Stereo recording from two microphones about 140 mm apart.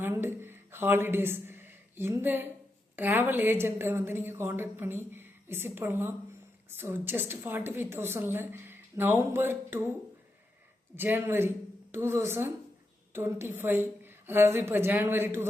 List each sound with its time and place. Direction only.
0.0 s a woman's voice: 15° right (ahead or behind)
10.9 s a woman's voice: 15° right (ahead or behind)